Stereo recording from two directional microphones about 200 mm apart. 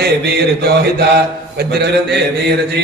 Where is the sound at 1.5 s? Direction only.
55° right (ahead or behind).